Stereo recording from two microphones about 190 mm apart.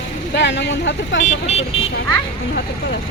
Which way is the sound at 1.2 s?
35° left (ahead or behind).